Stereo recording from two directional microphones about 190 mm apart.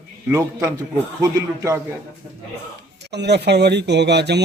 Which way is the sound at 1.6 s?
15° right (ahead or behind).